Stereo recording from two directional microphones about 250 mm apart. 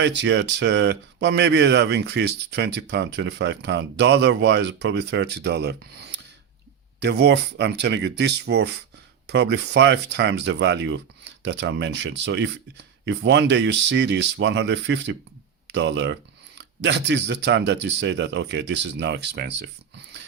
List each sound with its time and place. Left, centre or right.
0.0 s speech: right